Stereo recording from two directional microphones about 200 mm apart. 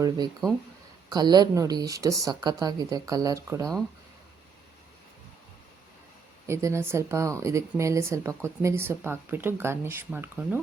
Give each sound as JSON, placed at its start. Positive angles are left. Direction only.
{"t": 1.1, "sound": "a woman's voice", "side_deg": -20}
{"t": 6.5, "sound": "a woman's voice", "side_deg": -15}